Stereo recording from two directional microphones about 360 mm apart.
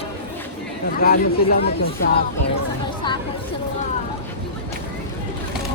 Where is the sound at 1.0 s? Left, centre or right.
Left.